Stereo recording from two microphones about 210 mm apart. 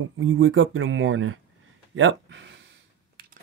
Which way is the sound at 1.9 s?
65° right (ahead or behind).